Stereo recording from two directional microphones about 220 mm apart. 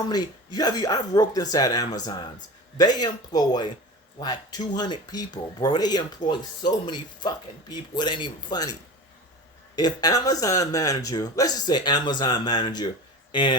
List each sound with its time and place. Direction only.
0.1 s speech: 20° left (ahead or behind)
9.7 s speech: 20° left (ahead or behind)